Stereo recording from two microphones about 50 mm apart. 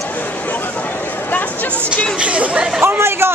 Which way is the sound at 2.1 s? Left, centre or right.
Right.